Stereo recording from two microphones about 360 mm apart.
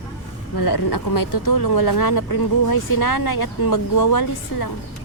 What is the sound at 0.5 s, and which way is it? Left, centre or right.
Speech, left.